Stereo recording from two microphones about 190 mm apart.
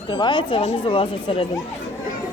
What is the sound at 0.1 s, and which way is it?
Speech, 25° left (ahead or behind).